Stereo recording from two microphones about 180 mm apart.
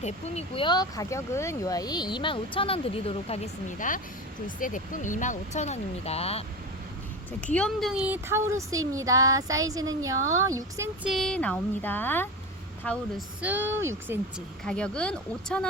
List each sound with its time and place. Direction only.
0.0 s speech: 35° left (ahead or behind)
7.4 s a woman's voice: 5° left (ahead or behind); by 10.8 s 20° right (ahead or behind)
11.0 s speech: centre (ahead or behind)
13.4 s a woman's voice: 10° right (ahead or behind)
14.6 s speech: 5° left (ahead or behind)